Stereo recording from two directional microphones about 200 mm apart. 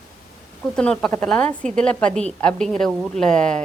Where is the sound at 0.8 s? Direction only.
5° left (ahead or behind).